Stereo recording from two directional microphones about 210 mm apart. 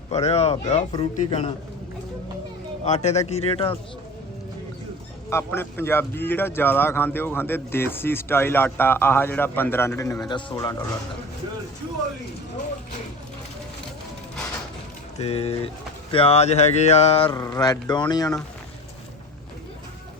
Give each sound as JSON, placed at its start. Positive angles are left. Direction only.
{"t": 0.1, "sound": "speech", "side_deg": 30}
{"t": 2.9, "sound": "speech", "side_deg": 30}
{"t": 5.3, "sound": "speech", "side_deg": 10}
{"t": 15.2, "sound": "speech", "side_deg": 30}
{"t": 17.2, "sound": "speech", "side_deg": 15}